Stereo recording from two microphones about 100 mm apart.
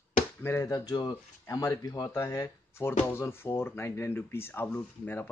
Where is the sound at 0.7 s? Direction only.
40° left (ahead or behind); by 5.3 s 20° left (ahead or behind).